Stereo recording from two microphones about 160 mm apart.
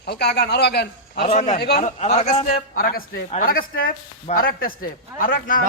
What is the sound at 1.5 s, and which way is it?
Speech, 90° left.